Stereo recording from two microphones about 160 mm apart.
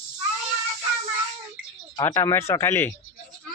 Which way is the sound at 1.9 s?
20° left (ahead or behind).